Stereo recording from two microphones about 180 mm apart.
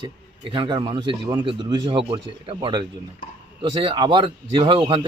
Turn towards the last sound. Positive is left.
turn(degrees=-30)  # may be behind; listen again after turning